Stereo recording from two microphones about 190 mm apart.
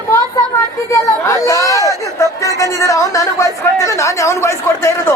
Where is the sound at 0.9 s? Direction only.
15° left (ahead or behind).